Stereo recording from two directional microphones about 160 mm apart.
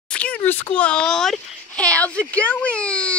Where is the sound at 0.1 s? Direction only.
10° left (ahead or behind).